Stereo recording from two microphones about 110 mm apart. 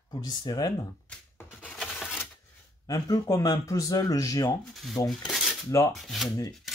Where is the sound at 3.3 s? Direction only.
30° left (ahead or behind).